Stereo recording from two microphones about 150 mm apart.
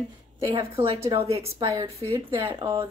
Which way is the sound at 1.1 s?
45° right (ahead or behind).